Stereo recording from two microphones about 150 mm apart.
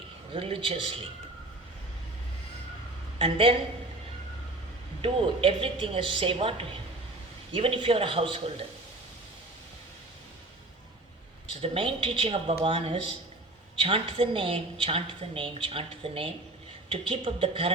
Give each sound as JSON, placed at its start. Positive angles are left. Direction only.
{"t": 0.3, "sound": "a woman's voice", "side_deg": -35}
{"t": 3.2, "sound": "a woman's voice", "side_deg": -35}
{"t": 5.0, "sound": "a woman's voice", "side_deg": -35}
{"t": 11.6, "sound": "a woman's voice", "side_deg": -35}